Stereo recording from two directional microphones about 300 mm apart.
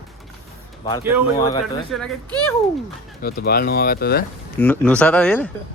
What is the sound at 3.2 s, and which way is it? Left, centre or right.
Speech, left.